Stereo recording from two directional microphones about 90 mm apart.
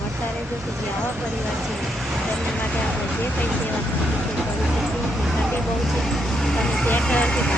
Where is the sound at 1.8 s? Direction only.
Centre (ahead or behind).